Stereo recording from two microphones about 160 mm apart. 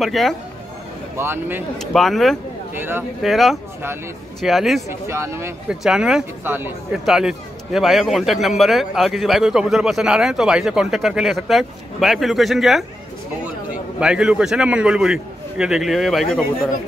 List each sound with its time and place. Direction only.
0.0 s a man's voice: centre (ahead or behind)
1.1 s speech: 15° right (ahead or behind)
1.8 s a man's voice: centre (ahead or behind)
2.7 s speech: 15° right (ahead or behind)
3.2 s a man's voice: centre (ahead or behind)
4.8 s speech: 15° right (ahead or behind)
5.7 s a man's voice: 5° right (ahead or behind)
7.1 s a man's voice: 5° right (ahead or behind)
13.9 s a man's voice: 5° right (ahead or behind)